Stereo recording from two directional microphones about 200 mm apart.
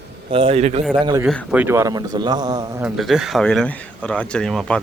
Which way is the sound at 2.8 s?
5° right (ahead or behind).